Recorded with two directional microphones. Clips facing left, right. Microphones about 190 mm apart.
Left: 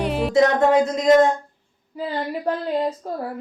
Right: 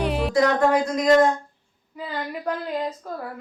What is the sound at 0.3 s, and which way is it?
A man's voice, 25° left (ahead or behind).